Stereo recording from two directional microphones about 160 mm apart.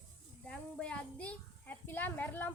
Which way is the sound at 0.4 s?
5° left (ahead or behind).